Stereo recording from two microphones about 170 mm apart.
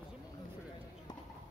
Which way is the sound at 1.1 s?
25° left (ahead or behind).